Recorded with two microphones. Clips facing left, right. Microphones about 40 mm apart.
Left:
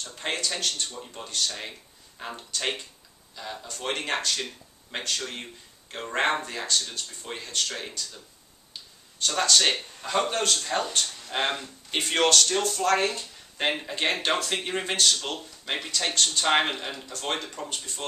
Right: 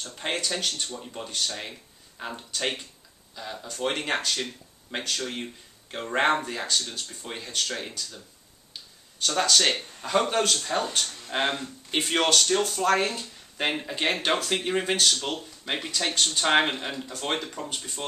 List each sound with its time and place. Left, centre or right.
0.1 s speech: centre
0.9 s speech: centre
1.2 s speech: centre
1.5 s speech: centre
9.4 s speech: centre
11.5 s speech: centre